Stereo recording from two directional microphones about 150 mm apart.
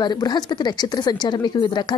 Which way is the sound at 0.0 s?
30° left (ahead or behind).